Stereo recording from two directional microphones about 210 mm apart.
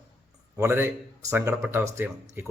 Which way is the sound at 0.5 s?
10° right (ahead or behind).